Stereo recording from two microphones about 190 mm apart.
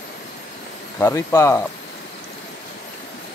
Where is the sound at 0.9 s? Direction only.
15° left (ahead or behind).